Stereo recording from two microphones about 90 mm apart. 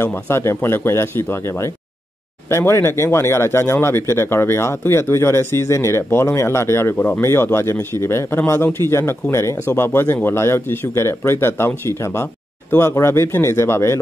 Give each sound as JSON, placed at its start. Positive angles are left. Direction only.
{"t": 0.0, "sound": "a man's voice", "side_deg": 30}